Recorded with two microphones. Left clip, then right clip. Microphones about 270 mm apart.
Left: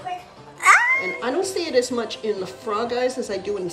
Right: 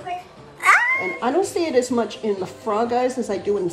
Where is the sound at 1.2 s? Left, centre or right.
Right.